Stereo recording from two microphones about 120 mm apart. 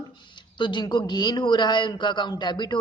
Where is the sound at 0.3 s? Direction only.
40° left (ahead or behind).